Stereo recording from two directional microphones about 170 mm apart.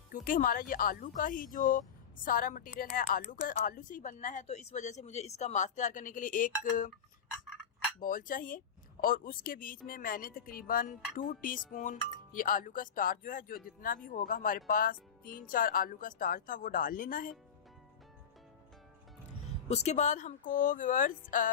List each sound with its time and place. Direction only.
0.1 s speech: 55° left (ahead or behind)
8.0 s speech: 55° left (ahead or behind)
19.6 s speech: 40° left (ahead or behind)